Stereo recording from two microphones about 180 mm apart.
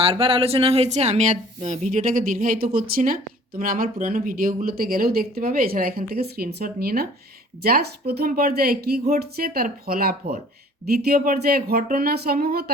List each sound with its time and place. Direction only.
0.0 s speech: 30° right (ahead or behind); by 12.7 s 55° right (ahead or behind)